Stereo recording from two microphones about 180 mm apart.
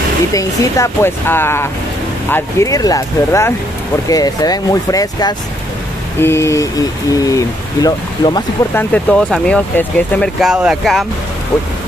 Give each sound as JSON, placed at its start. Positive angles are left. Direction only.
{"t": 0.3, "sound": "speech", "side_deg": 20}
{"t": 8.7, "sound": "speech", "side_deg": 5}